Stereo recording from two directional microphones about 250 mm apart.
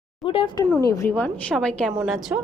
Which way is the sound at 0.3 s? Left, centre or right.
Left.